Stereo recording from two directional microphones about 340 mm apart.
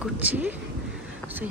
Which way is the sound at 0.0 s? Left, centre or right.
Centre.